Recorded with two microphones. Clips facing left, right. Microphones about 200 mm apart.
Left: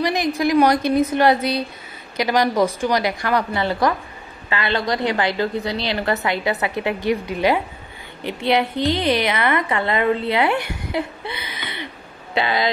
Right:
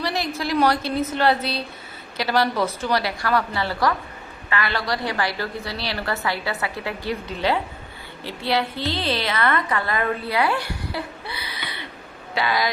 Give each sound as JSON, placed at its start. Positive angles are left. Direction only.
{"t": 0.0, "sound": "a woman's voice", "side_deg": 15}